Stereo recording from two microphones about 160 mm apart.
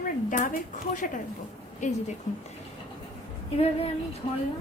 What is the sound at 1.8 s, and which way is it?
Speech, 50° left (ahead or behind).